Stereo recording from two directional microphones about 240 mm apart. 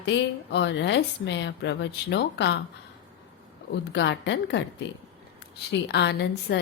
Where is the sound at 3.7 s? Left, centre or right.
Left.